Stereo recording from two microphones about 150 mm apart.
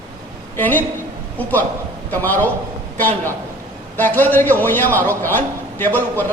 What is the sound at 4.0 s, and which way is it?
A man's voice, 10° left (ahead or behind).